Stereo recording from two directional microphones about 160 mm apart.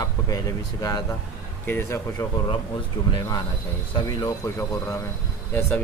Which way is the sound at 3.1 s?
25° left (ahead or behind).